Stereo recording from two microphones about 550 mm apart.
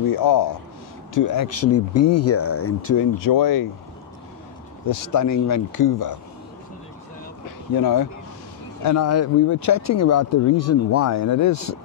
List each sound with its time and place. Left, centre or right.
0.1 s speech: left
4.8 s speech: left
8.8 s speech: left